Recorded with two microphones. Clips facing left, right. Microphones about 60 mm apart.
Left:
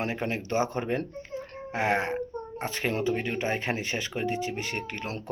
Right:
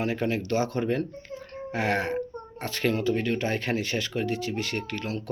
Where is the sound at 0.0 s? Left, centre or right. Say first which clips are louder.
Right 3 dB; left.